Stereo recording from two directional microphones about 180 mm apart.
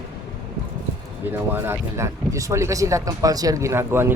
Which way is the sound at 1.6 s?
15° right (ahead or behind).